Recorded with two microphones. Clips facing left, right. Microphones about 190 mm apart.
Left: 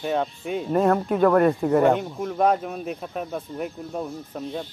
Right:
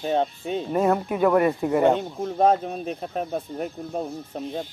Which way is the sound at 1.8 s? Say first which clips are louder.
Even; 25° right (ahead or behind).